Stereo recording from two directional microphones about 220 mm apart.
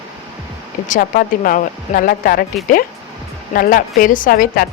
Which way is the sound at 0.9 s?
40° left (ahead or behind).